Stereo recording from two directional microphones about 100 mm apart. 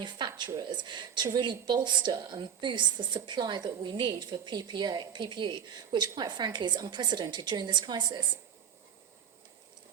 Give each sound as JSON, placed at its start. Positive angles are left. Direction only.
{"t": 0.0, "sound": "a woman's voice", "side_deg": -50}